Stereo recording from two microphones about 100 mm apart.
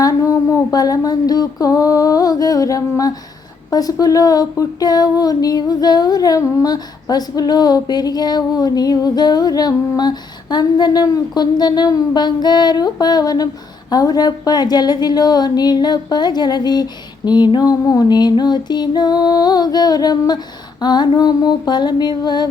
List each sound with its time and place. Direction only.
0.0 s female singing: 35° left (ahead or behind)
13.9 s a woman's voice: 40° left (ahead or behind)